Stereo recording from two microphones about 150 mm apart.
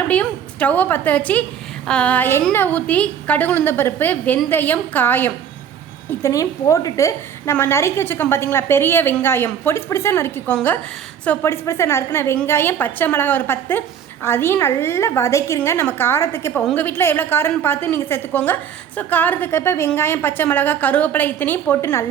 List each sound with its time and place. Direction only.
0.1 s a woman's voice: 10° left (ahead or behind)